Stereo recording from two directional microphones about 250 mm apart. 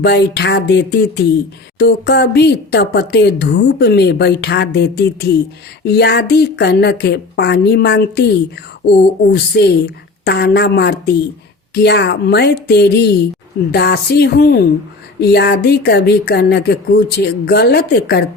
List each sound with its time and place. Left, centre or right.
0.0 s speech: left